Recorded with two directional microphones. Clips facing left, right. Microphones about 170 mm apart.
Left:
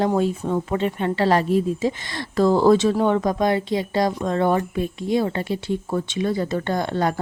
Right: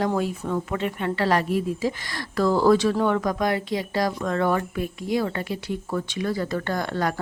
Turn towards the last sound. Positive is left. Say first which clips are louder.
# left 3 dB
turn(degrees=25)  # may be behind; listen again after turning